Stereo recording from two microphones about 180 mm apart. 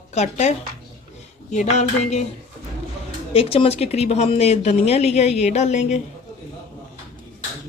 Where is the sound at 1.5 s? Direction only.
40° left (ahead or behind).